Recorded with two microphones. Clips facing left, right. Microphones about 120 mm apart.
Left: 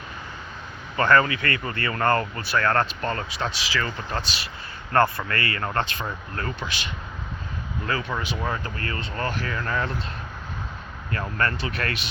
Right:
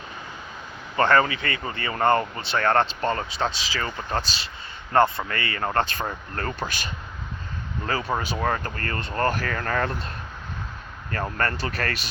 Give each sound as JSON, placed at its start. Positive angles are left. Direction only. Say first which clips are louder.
{"t": 0.9, "sound": "speech", "louder": "even", "side_deg": -30}
{"t": 11.1, "sound": "speech", "louder": "even", "side_deg": -40}